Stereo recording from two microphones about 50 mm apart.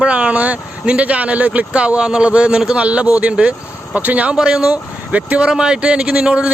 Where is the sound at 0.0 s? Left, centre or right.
Right.